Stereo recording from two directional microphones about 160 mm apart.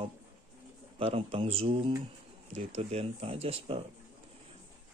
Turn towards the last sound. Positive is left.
turn(degrees=-35)  # may be behind; listen again after turning